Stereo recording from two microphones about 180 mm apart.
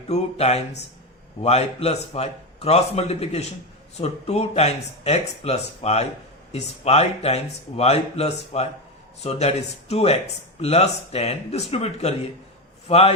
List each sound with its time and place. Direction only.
0.1 s speech: 35° left (ahead or behind)